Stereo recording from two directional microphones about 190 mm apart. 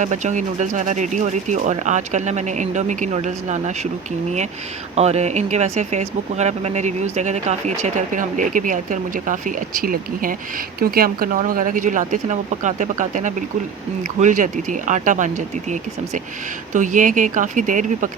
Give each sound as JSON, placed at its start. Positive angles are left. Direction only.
{"t": 0.0, "sound": "speech", "side_deg": -40}
{"t": 4.9, "sound": "speech", "side_deg": -35}